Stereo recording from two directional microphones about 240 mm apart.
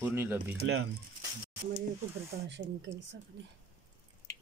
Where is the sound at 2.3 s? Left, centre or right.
Right.